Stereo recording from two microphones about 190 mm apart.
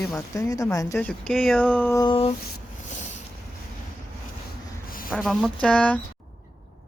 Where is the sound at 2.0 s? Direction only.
30° left (ahead or behind).